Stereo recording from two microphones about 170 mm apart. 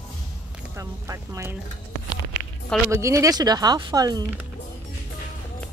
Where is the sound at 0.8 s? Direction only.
20° right (ahead or behind).